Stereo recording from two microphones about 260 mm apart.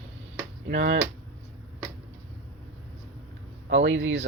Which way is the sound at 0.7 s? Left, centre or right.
Right.